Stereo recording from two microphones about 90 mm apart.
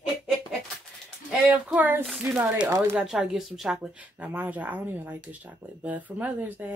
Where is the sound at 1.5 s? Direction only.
15° right (ahead or behind).